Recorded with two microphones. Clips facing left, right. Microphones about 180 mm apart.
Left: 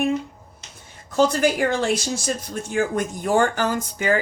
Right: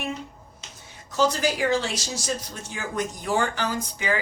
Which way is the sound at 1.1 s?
55° left (ahead or behind).